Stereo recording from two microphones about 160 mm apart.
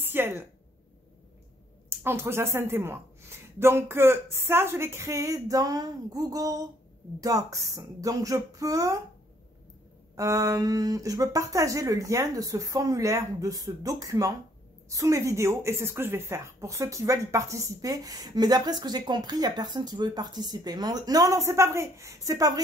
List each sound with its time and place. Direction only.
0.0 s a woman's voice: 15° right (ahead or behind)
1.9 s a woman's voice: 15° right (ahead or behind)
10.1 s a woman's voice: 20° right (ahead or behind)